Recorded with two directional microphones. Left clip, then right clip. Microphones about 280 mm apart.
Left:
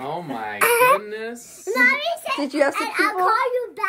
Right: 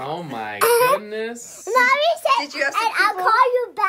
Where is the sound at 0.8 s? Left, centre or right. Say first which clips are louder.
Left 3 dB; centre.